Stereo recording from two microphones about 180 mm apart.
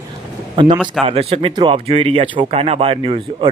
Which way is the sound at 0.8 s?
Centre (ahead or behind).